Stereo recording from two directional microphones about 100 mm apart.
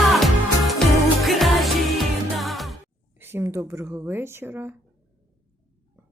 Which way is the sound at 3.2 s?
25° right (ahead or behind).